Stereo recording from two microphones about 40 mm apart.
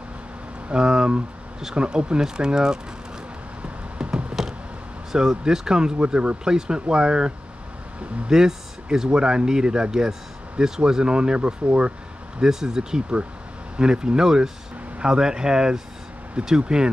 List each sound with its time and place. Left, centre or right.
0.7 s speech: centre
3.6 s a sound: right
5.1 s speech: centre
8.3 s speech: centre
12.4 s speech: centre